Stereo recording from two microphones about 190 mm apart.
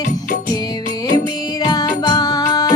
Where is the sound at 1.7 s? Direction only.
20° left (ahead or behind).